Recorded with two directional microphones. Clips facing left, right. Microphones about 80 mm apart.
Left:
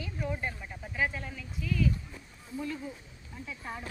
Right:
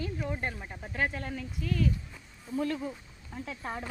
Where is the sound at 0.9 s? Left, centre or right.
Right.